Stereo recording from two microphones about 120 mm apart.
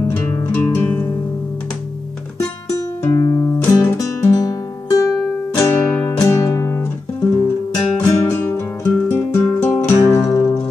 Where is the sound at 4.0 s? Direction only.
25° left (ahead or behind).